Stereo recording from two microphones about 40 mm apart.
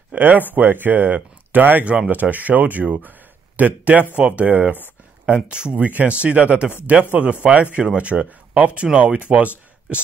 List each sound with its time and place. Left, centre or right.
0.1 s speech: right
3.0 s a sound: right
4.2 s speech: right
4.5 s speech: right
5.2 s speech: right
5.8 s speech: right